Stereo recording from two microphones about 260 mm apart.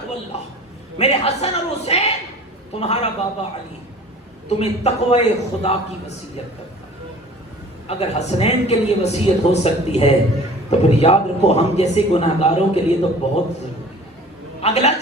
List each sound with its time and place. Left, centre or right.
0.3 s a man's voice: left
0.9 s a sound: left
2.7 s a man's voice: left
4.4 s a man's voice: left
7.9 s a man's voice: left
14.6 s a man's voice: left